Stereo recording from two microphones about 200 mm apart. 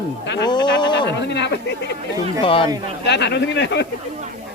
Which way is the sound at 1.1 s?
60° left (ahead or behind).